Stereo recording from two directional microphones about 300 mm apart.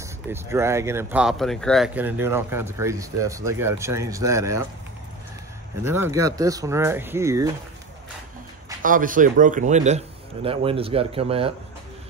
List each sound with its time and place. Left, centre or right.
0.0 s speech: centre
5.9 s speech: centre
8.8 s speech: right